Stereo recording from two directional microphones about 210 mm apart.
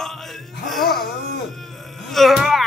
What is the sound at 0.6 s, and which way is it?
Music, centre (ahead or behind).